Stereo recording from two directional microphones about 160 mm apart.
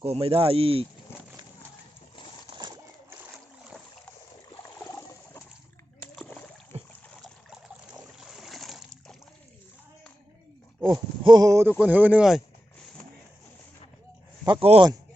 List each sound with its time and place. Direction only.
0.0 s speech: 35° right (ahead or behind)
4.9 s a sound: 20° left (ahead or behind)
6.7 s boat: 40° right (ahead or behind)
7.9 s boat: 5° right (ahead or behind)
11.2 s speech: 25° right (ahead or behind)
11.8 s speech: 10° right (ahead or behind)
14.4 s speech: 35° right (ahead or behind)